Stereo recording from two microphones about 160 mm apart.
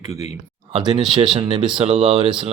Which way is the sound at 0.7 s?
30° right (ahead or behind).